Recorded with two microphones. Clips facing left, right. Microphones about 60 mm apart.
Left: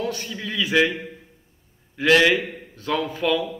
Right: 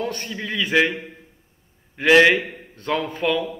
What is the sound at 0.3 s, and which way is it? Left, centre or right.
Mantra, centre.